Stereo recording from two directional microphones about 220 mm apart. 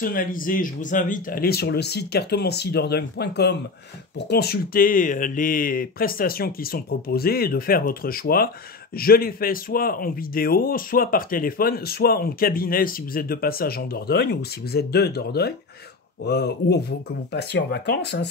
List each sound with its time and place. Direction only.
0.0 s speech: 40° left (ahead or behind)